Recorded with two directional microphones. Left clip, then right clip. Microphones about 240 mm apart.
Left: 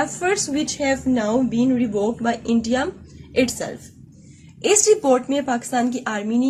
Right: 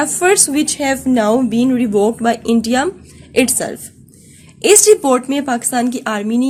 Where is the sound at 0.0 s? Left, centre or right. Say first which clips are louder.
Right 8 dB; right.